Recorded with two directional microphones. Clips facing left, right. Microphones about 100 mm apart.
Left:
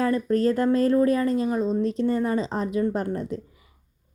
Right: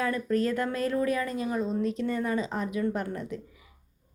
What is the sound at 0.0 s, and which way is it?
A woman's voice, 35° left (ahead or behind).